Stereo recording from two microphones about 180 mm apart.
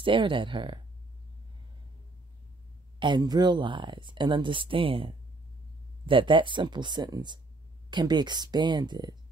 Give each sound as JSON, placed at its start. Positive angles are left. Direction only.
{"t": 0.0, "sound": "speech", "side_deg": -30}
{"t": 3.0, "sound": "speech", "side_deg": -25}